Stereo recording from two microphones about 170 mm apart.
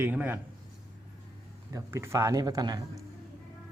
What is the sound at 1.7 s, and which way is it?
Speech, 15° right (ahead or behind).